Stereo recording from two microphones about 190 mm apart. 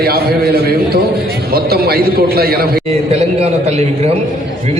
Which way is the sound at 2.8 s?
35° right (ahead or behind).